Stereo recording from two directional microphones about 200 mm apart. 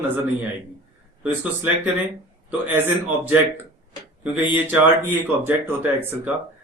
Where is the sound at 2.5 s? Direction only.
10° right (ahead or behind).